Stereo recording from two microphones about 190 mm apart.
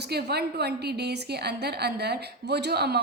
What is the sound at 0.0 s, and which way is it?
A woman's voice, 60° right (ahead or behind).